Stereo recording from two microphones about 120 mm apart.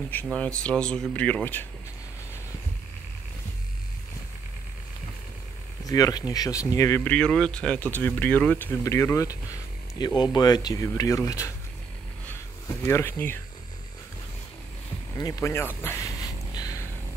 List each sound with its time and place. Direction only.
0.1 s speech: 15° left (ahead or behind)
5.9 s speech: 30° left (ahead or behind)
7.1 s speech: 10° left (ahead or behind)
8.8 s speech: 25° left (ahead or behind)
12.6 s speech: 20° left (ahead or behind)
15.1 s speech: 30° left (ahead or behind)
16.5 s a sound: 30° left (ahead or behind)